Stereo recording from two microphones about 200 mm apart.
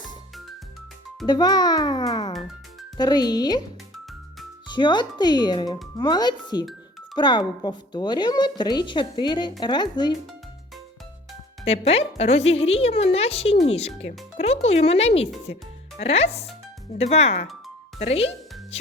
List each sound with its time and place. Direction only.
1.3 s speech: 20° left (ahead or behind)
4.7 s speech: 20° left (ahead or behind)
11.6 s speech: 30° left (ahead or behind)